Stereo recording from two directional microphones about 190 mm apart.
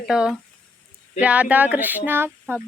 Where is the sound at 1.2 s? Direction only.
5° right (ahead or behind).